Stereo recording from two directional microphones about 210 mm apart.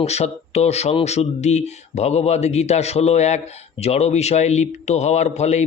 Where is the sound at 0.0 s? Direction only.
30° left (ahead or behind).